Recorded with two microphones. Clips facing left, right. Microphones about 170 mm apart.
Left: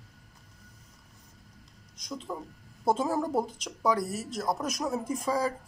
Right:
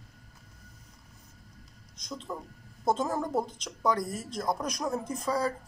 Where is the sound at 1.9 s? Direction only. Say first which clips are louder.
Left 1 dB; 10° left (ahead or behind).